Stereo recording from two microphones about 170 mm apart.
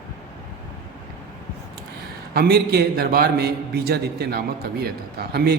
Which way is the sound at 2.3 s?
65° right (ahead or behind).